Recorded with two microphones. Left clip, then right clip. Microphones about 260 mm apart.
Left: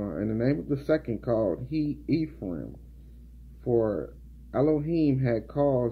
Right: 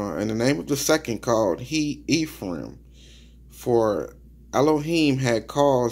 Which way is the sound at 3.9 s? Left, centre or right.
Right.